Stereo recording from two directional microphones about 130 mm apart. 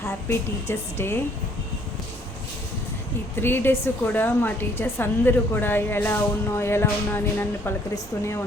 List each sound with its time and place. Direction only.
0.3 s a woman's voice: 20° left (ahead or behind)
3.4 s a woman's voice: 15° left (ahead or behind)